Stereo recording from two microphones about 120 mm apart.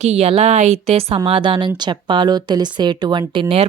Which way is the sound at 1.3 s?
45° right (ahead or behind).